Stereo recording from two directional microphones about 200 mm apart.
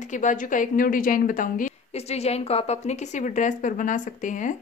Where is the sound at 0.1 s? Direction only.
40° left (ahead or behind).